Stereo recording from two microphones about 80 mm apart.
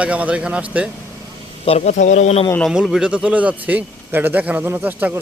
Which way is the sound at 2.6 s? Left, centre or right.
Centre.